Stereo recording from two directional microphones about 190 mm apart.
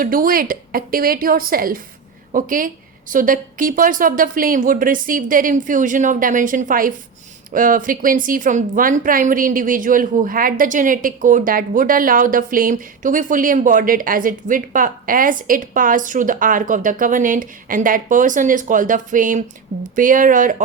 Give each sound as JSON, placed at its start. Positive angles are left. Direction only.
{"t": 0.0, "sound": "a woman's voice", "side_deg": -50}